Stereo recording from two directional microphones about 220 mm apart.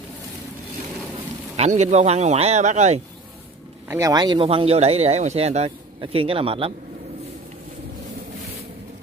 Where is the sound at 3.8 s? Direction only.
15° right (ahead or behind).